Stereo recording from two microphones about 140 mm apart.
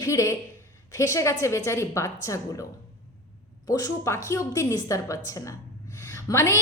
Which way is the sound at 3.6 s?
25° left (ahead or behind).